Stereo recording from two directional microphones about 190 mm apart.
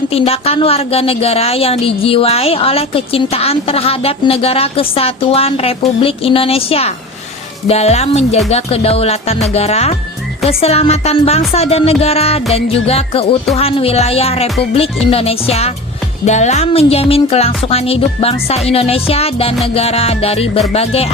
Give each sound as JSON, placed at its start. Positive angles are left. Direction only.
{"t": 0.1, "sound": "a woman's voice", "side_deg": 30}